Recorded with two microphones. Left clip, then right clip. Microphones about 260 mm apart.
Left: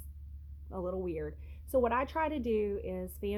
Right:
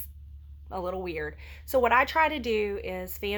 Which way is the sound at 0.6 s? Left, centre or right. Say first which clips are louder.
Right 6 dB; right.